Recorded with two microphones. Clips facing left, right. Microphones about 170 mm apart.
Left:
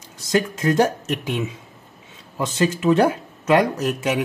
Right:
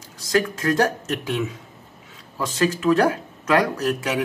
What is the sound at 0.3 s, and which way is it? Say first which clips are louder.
A man's voice: left 1 dB; 20° left (ahead or behind).